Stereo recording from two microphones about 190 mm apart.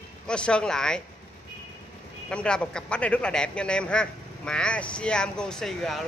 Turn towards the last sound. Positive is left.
turn(degrees=0)  # may be behind; listen again after turning